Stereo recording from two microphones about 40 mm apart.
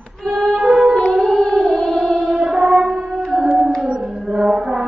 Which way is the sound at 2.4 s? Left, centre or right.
Centre.